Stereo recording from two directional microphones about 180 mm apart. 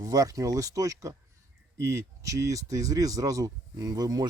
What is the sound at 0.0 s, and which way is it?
Speech, 20° right (ahead or behind).